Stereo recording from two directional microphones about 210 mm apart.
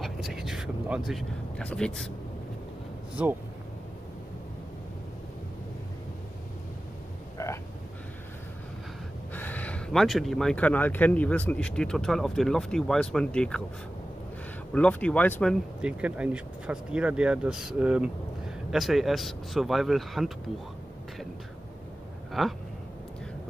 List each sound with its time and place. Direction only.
0.0 s speech: centre (ahead or behind)
7.4 s vehicle: 15° left (ahead or behind)
9.3 s speech: 10° left (ahead or behind)
14.7 s speech: 5° left (ahead or behind)
15.8 s speech: 5° right (ahead or behind)
22.4 s speech: centre (ahead or behind)